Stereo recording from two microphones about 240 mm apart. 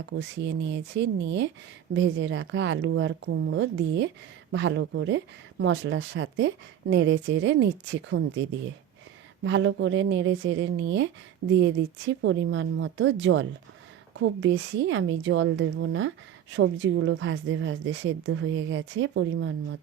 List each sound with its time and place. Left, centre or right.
0.2 s a woman's voice: right